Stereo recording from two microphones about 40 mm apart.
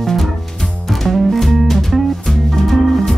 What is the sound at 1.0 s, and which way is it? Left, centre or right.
Music, centre.